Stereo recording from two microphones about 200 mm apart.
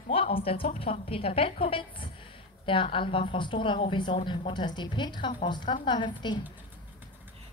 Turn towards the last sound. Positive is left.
turn(degrees=20)  # may be behind; listen again after turning